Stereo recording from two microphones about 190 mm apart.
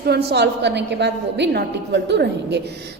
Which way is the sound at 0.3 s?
60° right (ahead or behind).